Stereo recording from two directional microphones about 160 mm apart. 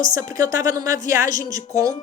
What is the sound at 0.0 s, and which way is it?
A woman's voice, 20° right (ahead or behind).